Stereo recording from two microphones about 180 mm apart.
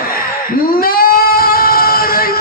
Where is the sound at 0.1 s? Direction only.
55° left (ahead or behind).